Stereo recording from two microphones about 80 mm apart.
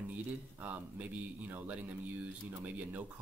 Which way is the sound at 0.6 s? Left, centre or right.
Right.